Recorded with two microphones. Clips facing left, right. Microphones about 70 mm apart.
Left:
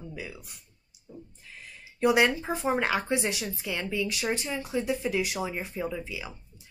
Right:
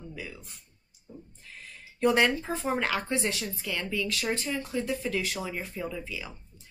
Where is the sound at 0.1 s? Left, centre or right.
Centre.